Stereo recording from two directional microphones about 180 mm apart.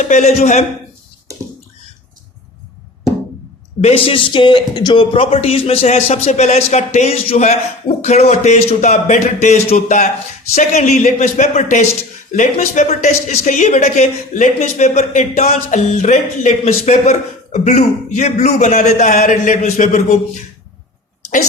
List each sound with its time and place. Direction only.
0.0 s speech: 40° left (ahead or behind)
3.8 s speech: 35° left (ahead or behind)